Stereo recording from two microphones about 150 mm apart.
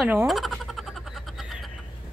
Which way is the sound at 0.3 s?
Centre (ahead or behind).